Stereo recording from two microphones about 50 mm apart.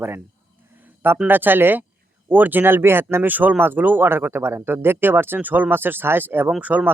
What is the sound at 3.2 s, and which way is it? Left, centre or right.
Speech, right.